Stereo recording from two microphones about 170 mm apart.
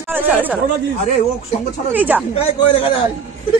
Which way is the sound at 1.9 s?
10° right (ahead or behind).